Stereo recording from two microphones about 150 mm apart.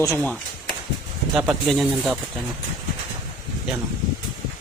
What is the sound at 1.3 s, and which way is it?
Speech, centre (ahead or behind).